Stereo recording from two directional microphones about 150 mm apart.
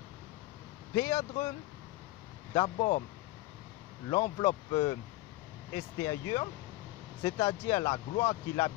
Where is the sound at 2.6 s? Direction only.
45° left (ahead or behind).